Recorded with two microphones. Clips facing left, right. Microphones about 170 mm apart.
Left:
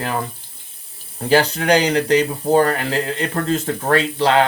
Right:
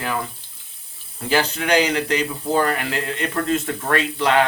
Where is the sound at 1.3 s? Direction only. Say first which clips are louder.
Left 4 dB; 35° left (ahead or behind).